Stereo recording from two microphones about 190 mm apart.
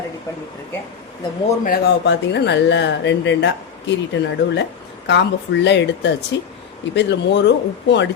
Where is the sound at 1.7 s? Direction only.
65° left (ahead or behind).